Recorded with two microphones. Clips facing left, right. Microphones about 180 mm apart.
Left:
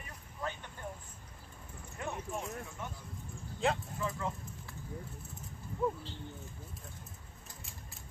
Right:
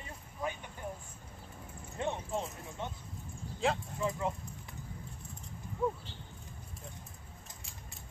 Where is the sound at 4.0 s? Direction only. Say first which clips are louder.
Right 3 dB; 20° right (ahead or behind).